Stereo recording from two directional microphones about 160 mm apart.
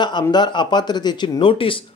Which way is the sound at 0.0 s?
25° left (ahead or behind).